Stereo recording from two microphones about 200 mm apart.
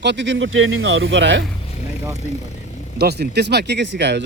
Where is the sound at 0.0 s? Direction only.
60° right (ahead or behind).